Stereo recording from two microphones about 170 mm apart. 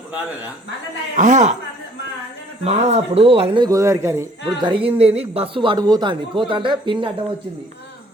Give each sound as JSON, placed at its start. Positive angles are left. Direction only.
{"t": 1.1, "sound": "a man's voice", "side_deg": -45}
{"t": 2.6, "sound": "speech", "side_deg": -40}
{"t": 4.4, "sound": "speech", "side_deg": -30}